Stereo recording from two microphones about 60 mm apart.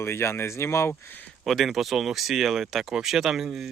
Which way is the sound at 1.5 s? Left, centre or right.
Centre.